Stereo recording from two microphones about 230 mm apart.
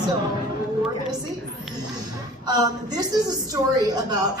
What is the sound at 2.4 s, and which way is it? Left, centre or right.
A woman's voice, centre.